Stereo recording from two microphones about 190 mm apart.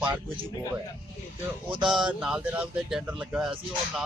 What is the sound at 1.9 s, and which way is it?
Speech, 5° right (ahead or behind).